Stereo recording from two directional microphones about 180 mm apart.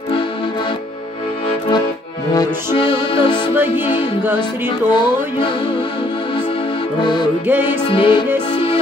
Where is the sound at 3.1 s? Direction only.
30° left (ahead or behind).